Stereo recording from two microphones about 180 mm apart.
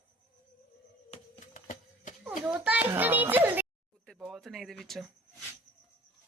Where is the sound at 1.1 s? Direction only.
45° left (ahead or behind).